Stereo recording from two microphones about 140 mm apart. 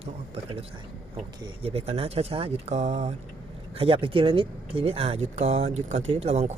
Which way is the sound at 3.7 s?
40° right (ahead or behind).